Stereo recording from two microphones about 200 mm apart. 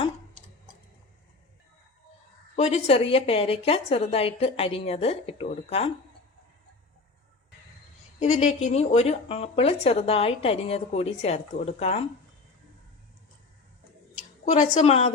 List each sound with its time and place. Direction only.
2.6 s a woman's voice: 35° left (ahead or behind)
8.2 s speech: 35° left (ahead or behind)
14.4 s speech: 40° left (ahead or behind)